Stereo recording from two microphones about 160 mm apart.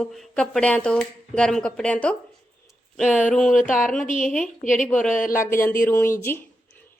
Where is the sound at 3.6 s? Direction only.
55° left (ahead or behind).